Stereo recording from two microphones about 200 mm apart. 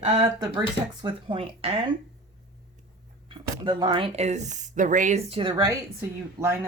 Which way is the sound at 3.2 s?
25° right (ahead or behind).